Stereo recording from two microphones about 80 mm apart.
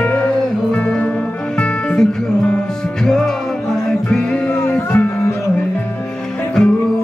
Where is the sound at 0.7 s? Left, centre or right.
Centre.